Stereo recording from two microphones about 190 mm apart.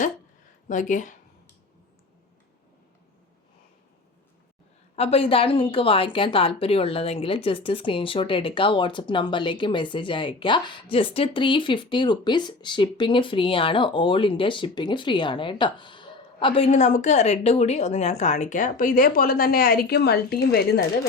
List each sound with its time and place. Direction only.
0.7 s speech: 40° left (ahead or behind)
4.9 s speech: 30° left (ahead or behind); by 20.8 s 55° left (ahead or behind)